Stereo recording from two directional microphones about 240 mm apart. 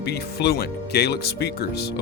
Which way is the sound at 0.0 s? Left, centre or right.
Left.